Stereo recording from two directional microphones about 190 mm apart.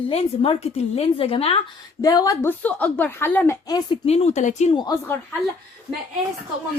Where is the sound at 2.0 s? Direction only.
20° left (ahead or behind).